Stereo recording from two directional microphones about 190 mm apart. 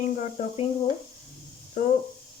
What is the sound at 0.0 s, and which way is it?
Speech, 40° left (ahead or behind).